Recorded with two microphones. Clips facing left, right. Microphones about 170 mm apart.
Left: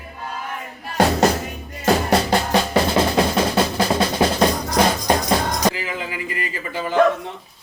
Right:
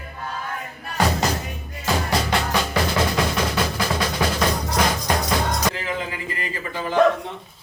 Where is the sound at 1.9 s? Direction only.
35° left (ahead or behind).